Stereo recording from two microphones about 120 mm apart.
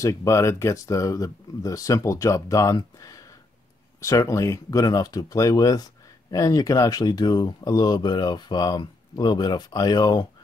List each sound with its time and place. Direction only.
0.0 s speech: 25° left (ahead or behind)